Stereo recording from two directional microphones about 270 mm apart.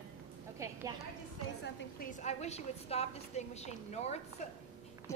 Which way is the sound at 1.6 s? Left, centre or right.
Left.